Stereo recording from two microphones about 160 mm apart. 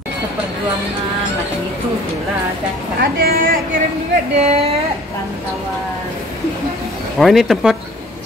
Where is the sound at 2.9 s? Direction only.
70° right (ahead or behind).